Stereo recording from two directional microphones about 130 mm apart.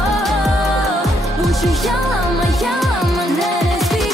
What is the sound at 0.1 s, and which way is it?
Music, centre (ahead or behind).